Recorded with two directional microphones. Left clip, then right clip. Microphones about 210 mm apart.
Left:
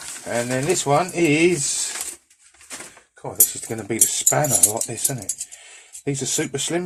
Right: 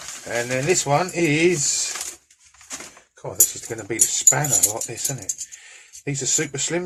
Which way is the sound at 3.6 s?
30° left (ahead or behind).